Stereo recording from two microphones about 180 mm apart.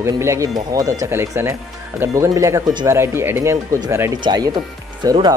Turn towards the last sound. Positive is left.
turn(degrees=-25)  # may be behind; listen again after turning